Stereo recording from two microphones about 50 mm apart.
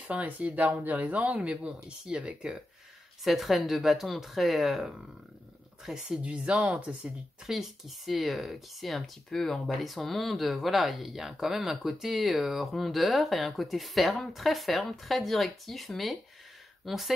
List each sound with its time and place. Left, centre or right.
0.1 s speech: right
3.3 s speech: centre
6.2 s speech: right
7.4 s speech: centre